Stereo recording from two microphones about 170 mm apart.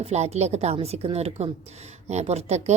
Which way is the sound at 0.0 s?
40° right (ahead or behind).